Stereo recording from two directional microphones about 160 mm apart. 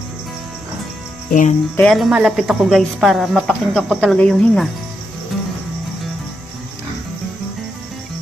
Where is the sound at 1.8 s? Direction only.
Centre (ahead or behind).